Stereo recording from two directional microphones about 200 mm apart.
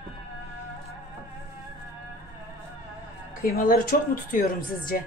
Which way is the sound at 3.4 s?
45° left (ahead or behind).